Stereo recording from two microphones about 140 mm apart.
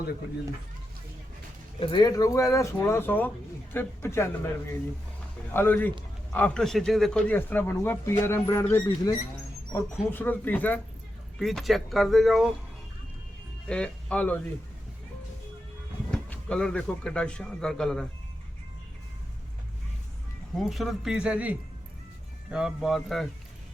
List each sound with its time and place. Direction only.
1.8 s speech: 30° left (ahead or behind); by 10.8 s 10° left (ahead or behind)
11.3 s speech: centre (ahead or behind)
13.7 s speech: 5° left (ahead or behind)
16.1 s speech: 5° left (ahead or behind)
20.6 s speech: centre (ahead or behind)